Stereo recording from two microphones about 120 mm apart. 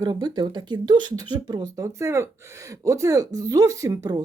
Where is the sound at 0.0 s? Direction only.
35° right (ahead or behind).